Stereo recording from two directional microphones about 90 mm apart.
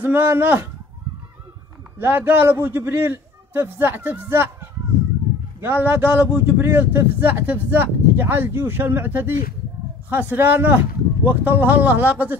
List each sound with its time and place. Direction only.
0.0 s a man's voice: 20° right (ahead or behind)
2.0 s a man's voice: 20° right (ahead or behind)